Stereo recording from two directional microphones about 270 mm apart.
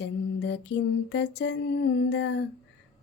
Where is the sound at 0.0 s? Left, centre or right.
Left.